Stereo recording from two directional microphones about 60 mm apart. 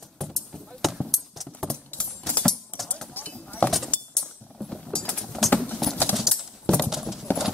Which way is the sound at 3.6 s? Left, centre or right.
Centre.